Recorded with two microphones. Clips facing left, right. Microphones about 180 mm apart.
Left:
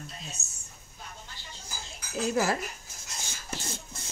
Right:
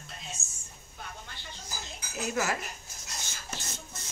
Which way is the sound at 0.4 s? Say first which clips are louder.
Even; 65° left (ahead or behind).